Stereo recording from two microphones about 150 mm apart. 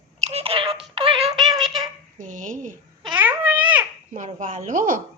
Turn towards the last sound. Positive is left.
turn(degrees=-60)  # may be behind; listen again after turning